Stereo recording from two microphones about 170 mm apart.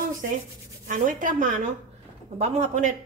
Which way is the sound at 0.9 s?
50° right (ahead or behind).